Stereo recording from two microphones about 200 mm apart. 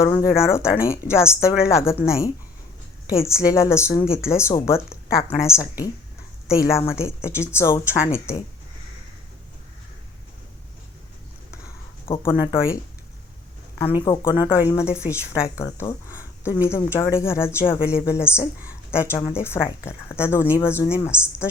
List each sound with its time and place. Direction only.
0.0 s speech: 15° left (ahead or behind)
12.1 s speech: 15° left (ahead or behind)
13.7 s speech: 15° left (ahead or behind)